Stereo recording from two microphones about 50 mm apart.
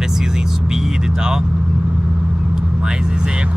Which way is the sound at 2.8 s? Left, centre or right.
Centre.